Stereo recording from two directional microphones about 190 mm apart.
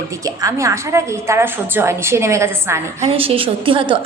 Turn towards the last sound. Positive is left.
turn(degrees=-25)  # may be behind; listen again after turning